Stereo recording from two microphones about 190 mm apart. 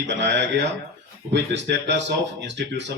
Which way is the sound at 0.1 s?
65° right (ahead or behind).